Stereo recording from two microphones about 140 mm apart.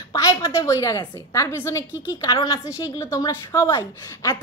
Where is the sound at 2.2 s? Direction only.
30° left (ahead or behind).